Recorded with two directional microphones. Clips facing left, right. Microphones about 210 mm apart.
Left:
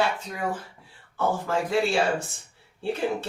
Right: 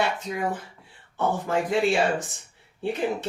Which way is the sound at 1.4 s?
20° right (ahead or behind).